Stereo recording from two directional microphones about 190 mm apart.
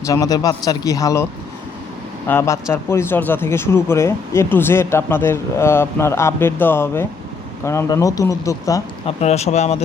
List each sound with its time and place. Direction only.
0.0 s speech: 20° left (ahead or behind)
9.0 s speech: 35° left (ahead or behind)